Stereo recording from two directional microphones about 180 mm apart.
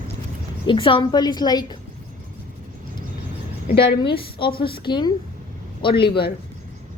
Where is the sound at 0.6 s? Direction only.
30° left (ahead or behind).